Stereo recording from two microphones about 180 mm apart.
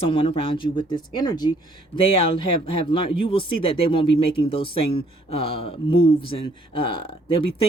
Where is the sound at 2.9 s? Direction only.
30° left (ahead or behind).